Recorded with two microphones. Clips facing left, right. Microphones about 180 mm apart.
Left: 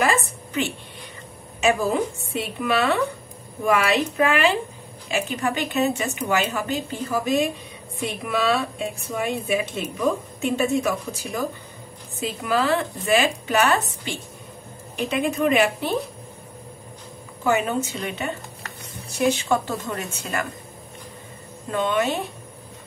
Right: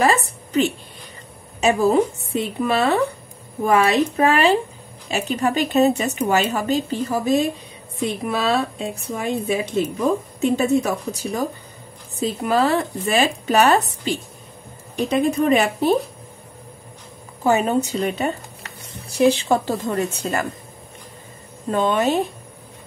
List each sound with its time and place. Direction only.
0.0 s a woman's voice: 35° right (ahead or behind)
17.4 s speech: 35° right (ahead or behind)
21.6 s speech: 35° right (ahead or behind)